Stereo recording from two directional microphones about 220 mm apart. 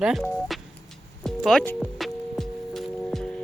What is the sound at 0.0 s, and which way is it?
Speech, centre (ahead or behind).